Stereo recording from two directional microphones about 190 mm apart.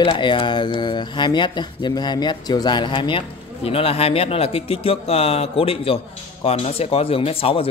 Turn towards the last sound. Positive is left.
turn(degrees=30)  # may be behind; listen again after turning